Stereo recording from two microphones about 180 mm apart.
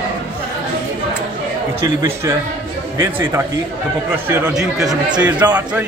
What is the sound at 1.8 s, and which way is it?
A man's voice, 15° right (ahead or behind).